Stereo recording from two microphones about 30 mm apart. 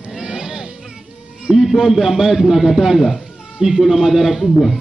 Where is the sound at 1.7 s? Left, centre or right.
Centre.